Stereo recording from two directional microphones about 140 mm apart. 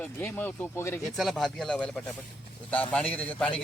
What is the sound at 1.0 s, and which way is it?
Speech, centre (ahead or behind).